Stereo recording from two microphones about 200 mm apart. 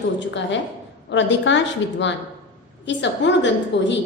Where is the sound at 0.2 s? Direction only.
65° left (ahead or behind).